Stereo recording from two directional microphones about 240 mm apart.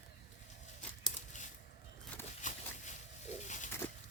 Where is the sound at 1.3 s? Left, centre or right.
Left.